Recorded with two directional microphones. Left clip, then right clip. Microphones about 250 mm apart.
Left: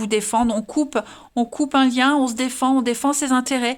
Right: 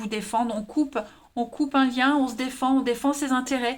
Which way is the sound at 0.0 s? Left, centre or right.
Left.